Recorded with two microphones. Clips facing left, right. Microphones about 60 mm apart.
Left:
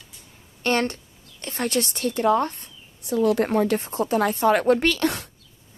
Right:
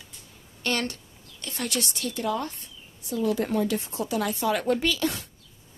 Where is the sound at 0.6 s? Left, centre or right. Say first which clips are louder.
Left 6 dB; left.